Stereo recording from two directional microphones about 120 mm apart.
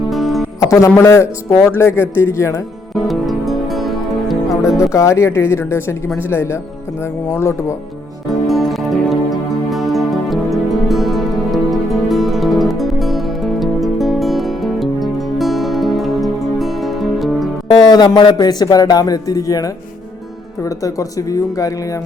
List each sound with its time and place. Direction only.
0.1 s music: centre (ahead or behind)
0.6 s music: 25° left (ahead or behind)
0.9 s speech: 20° left (ahead or behind)
2.9 s music: centre (ahead or behind)
4.9 s speech: 25° left (ahead or behind)
8.3 s music: centre (ahead or behind)
17.8 s a man's voice: 35° left (ahead or behind)